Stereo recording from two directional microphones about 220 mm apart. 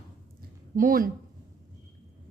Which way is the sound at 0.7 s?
40° right (ahead or behind).